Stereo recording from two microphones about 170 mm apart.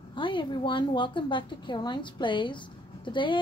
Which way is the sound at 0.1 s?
30° left (ahead or behind).